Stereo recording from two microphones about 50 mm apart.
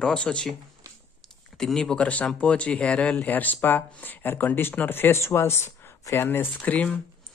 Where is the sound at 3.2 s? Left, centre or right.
Left.